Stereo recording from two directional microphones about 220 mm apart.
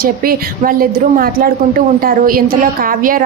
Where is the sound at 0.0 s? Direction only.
40° right (ahead or behind).